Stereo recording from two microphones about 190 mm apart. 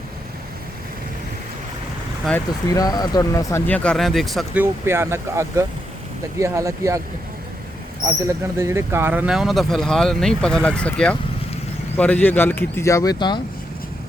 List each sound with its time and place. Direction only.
2.6 s speech: 20° left (ahead or behind); by 4.6 s centre (ahead or behind)
4.6 s speech: 15° right (ahead or behind)
8.0 s speech: 15° right (ahead or behind); by 13.4 s 25° left (ahead or behind)